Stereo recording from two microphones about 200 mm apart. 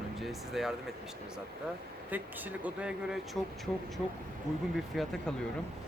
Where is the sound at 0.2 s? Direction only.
Centre (ahead or behind).